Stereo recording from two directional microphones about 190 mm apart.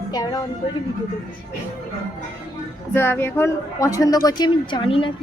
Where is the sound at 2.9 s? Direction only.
10° left (ahead or behind).